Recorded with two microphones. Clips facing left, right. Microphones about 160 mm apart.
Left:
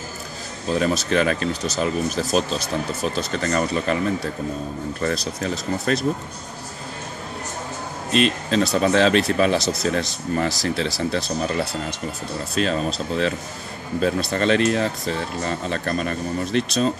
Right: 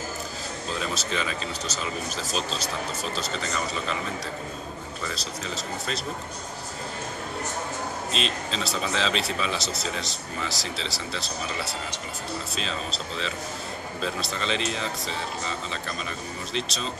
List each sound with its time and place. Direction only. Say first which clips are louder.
0.7 s speech: left 10 dB; 55° left (ahead or behind)
5.0 s speech: left 10 dB; 60° left (ahead or behind)
8.1 s speech: left 14 dB; 55° left (ahead or behind)